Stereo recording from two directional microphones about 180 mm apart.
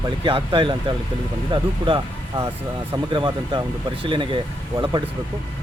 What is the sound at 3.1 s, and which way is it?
Speech, 25° right (ahead or behind).